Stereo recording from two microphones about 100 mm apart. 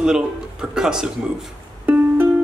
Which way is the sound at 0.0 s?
5° right (ahead or behind).